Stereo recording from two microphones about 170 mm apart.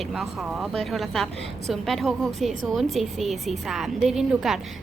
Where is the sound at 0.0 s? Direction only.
Centre (ahead or behind).